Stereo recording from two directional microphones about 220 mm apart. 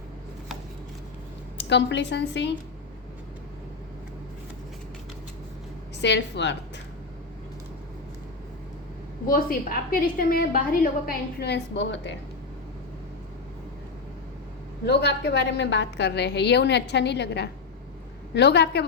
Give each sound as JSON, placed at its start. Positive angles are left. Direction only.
{"t": 1.5, "sound": "a woman's voice", "side_deg": 50}
{"t": 6.0, "sound": "a woman's voice", "side_deg": 50}
{"t": 9.2, "sound": "a woman's voice", "side_deg": 40}
{"t": 14.8, "sound": "a woman's voice", "side_deg": 50}